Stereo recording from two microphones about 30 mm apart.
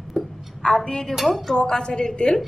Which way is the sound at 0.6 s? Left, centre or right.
Left.